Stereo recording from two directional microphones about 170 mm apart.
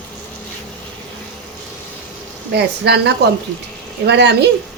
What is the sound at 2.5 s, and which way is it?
A woman's voice, 80° right.